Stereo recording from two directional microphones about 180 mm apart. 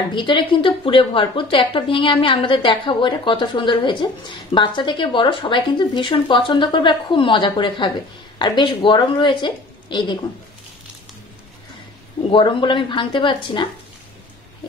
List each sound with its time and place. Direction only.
0.1 s a woman's voice: 25° left (ahead or behind)
12.3 s a woman's voice: 30° left (ahead or behind)